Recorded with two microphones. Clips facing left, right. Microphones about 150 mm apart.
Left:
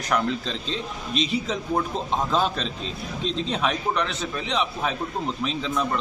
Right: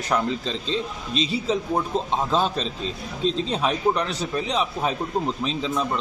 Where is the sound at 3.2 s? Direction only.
35° right (ahead or behind).